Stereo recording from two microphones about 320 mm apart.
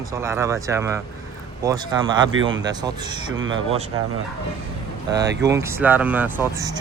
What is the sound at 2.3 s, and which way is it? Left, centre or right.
Speech, right.